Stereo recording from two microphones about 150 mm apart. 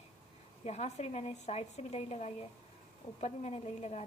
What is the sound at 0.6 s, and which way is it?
A woman's voice, 45° left (ahead or behind).